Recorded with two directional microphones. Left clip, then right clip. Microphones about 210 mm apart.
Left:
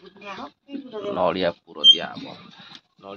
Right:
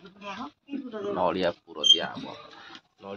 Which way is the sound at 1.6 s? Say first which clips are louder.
Left 7 dB; 25° left (ahead or behind).